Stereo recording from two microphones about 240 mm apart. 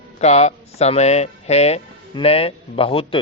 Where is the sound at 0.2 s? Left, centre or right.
Left.